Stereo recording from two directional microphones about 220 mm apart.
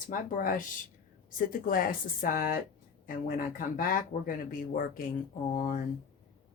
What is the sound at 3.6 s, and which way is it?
Speech, 40° left (ahead or behind).